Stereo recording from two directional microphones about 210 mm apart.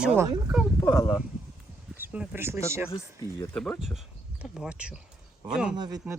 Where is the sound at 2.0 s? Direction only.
10° right (ahead or behind).